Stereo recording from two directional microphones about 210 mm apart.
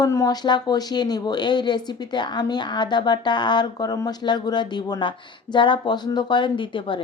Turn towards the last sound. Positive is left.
turn(degrees=25)  # may be behind; listen again after turning